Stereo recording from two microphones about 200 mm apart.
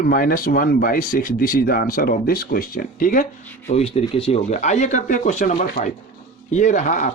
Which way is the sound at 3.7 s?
30° left (ahead or behind).